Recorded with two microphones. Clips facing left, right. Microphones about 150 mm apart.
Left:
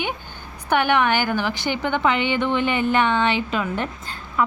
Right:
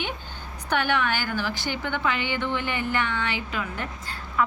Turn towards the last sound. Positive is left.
turn(degrees=25)  # may be behind; listen again after turning